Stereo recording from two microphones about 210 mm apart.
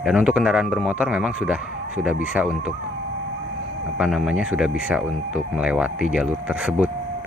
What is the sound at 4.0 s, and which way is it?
Speech, 5° right (ahead or behind).